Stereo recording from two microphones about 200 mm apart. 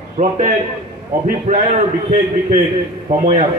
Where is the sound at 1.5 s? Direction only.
35° right (ahead or behind).